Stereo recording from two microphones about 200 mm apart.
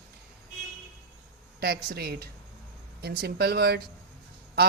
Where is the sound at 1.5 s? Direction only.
50° right (ahead or behind).